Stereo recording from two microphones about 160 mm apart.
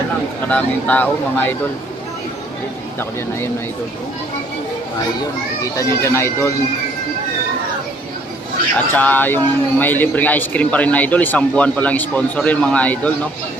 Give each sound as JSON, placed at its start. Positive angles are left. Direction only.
{"t": 0.4, "sound": "speech", "side_deg": 10}
{"t": 5.7, "sound": "speech", "side_deg": 15}
{"t": 8.9, "sound": "speech", "side_deg": 10}